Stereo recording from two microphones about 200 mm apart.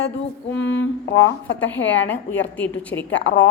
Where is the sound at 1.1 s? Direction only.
65° left (ahead or behind).